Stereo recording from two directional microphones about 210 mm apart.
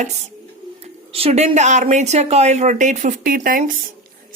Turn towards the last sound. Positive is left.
turn(degrees=-40)  # may be behind; listen again after turning